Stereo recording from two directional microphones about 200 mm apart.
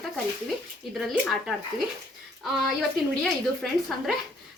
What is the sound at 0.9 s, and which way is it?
Speech, centre (ahead or behind).